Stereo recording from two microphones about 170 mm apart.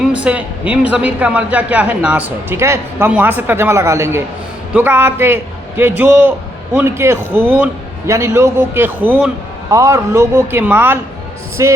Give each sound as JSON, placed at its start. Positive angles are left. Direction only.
{"t": 0.0, "sound": "speech", "side_deg": -5}